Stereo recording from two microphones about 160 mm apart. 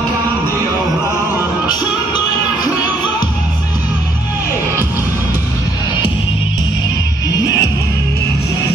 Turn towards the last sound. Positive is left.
turn(degrees=25)  # may be behind; listen again after turning